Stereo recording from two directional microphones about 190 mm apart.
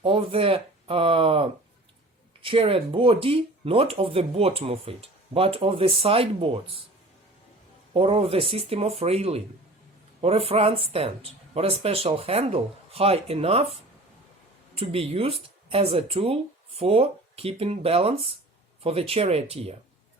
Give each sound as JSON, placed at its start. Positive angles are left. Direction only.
{"t": 0.0, "sound": "speech", "side_deg": -30}
{"t": 7.9, "sound": "speech", "side_deg": -30}
{"t": 14.8, "sound": "speech", "side_deg": -30}